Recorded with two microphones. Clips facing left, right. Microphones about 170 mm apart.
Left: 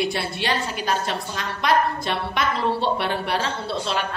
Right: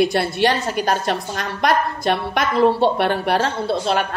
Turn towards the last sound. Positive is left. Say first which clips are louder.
# right 6 dB
turn(degrees=-50)  # may be behind; listen again after turning